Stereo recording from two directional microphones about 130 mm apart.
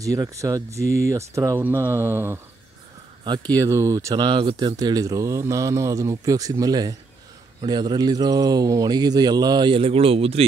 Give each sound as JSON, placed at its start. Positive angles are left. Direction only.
{"t": 0.0, "sound": "speech", "side_deg": -25}
{"t": 3.5, "sound": "speech", "side_deg": -25}